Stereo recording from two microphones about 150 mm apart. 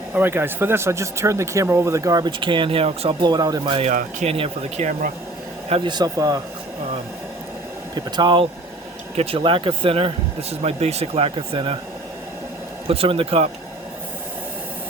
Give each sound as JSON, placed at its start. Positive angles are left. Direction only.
{"t": 0.1, "sound": "speech", "side_deg": -15}
{"t": 3.8, "sound": "speech", "side_deg": -50}
{"t": 7.9, "sound": "speech", "side_deg": -30}
{"t": 12.9, "sound": "speech", "side_deg": -40}